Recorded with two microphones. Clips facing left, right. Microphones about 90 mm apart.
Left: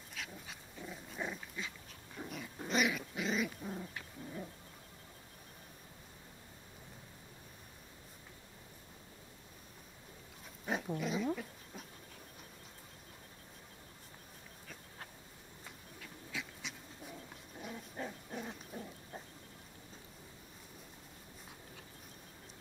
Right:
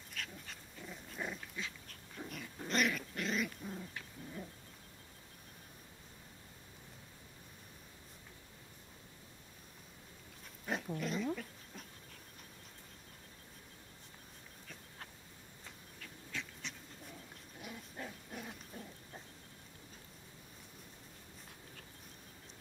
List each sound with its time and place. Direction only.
0.1 s dog: 5° left (ahead or behind)
3.7 s dog: 20° left (ahead or behind)
10.6 s dog: 10° left (ahead or behind)
16.0 s dog: 5° left (ahead or behind)
18.7 s a sound: 15° left (ahead or behind)